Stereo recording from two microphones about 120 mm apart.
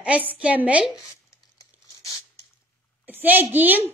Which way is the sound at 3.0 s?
15° right (ahead or behind).